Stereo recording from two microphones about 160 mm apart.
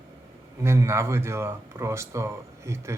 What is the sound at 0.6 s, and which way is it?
Speech, 15° right (ahead or behind).